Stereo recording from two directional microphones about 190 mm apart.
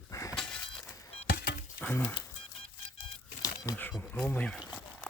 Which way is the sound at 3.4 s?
15° left (ahead or behind).